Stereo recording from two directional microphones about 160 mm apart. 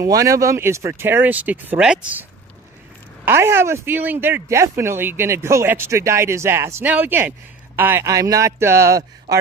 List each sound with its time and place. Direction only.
0.0 s speech: 20° right (ahead or behind)
3.2 s a man's voice: 15° right (ahead or behind)